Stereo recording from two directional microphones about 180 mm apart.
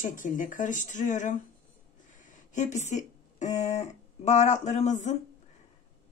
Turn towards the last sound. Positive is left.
turn(degrees=40)  # may be behind; listen again after turning